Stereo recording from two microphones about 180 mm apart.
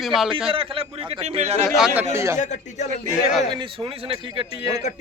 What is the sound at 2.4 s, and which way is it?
Speech, 40° left (ahead or behind).